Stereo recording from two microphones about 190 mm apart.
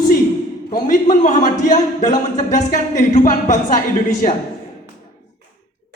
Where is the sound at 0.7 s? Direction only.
40° left (ahead or behind).